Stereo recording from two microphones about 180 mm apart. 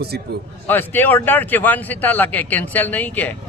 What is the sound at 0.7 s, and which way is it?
Speech, 10° left (ahead or behind).